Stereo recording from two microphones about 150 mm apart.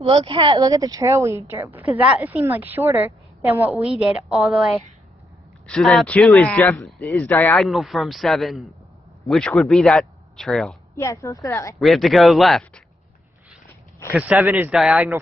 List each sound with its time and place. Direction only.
0.0 s a woman's voice: 40° right (ahead or behind); by 6.9 s 15° left (ahead or behind)
6.9 s a man's voice: centre (ahead or behind)
7.2 s speech: 15° left (ahead or behind)
7.6 s a man's voice: centre (ahead or behind)
11.0 s a woman's voice: 20° left (ahead or behind)
11.8 s a man's voice: centre (ahead or behind)
13.7 s walk: 15° left (ahead or behind)
14.1 s a woman's voice: 10° right (ahead or behind)